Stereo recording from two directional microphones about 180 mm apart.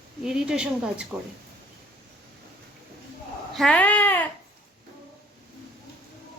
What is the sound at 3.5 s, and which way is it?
Speech, 5° left (ahead or behind).